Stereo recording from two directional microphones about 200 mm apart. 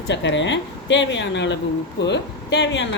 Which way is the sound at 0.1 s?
65° left (ahead or behind).